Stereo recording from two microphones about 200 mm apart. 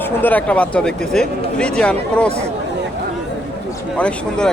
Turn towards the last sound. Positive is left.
turn(degrees=5)  # may be behind; listen again after turning